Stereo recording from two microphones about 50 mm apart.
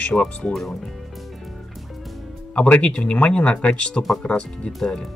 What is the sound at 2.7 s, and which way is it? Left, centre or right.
Speech, left.